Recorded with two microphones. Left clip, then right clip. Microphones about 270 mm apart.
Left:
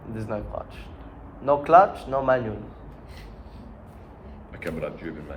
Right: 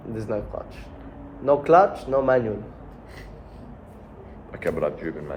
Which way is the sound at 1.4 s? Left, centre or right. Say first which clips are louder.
Even; centre.